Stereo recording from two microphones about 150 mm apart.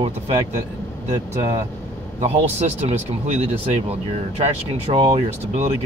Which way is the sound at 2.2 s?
50° right (ahead or behind).